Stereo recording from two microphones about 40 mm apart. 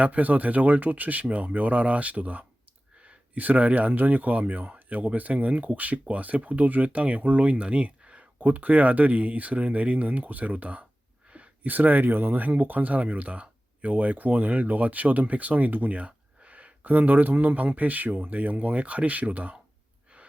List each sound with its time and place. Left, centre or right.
0.0 s speech: right
3.9 s speech: right
7.6 s a sound: right
8.4 s speech: right
16.0 s speech: right